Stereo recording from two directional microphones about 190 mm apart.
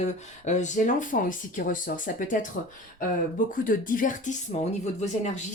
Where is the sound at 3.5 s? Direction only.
45° left (ahead or behind).